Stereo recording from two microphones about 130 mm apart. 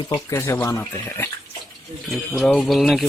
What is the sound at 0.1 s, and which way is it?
Speech, 20° left (ahead or behind).